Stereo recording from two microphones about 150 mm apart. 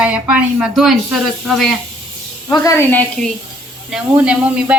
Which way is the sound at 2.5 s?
20° left (ahead or behind).